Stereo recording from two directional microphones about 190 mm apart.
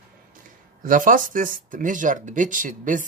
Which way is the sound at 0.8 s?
45° right (ahead or behind).